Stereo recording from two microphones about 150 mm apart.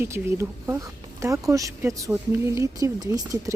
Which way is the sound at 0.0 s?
15° right (ahead or behind).